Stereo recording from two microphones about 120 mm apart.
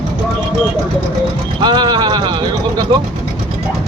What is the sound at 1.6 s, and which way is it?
Speech, 35° right (ahead or behind).